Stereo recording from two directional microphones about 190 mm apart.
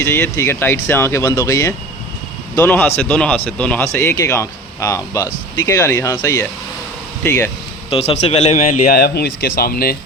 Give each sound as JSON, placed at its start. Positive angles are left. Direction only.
{"t": 0.3, "sound": "speech", "side_deg": 15}
{"t": 7.9, "sound": "a man's voice", "side_deg": 30}